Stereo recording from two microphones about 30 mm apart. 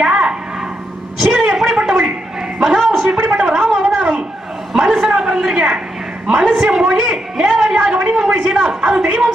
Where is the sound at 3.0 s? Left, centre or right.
Right.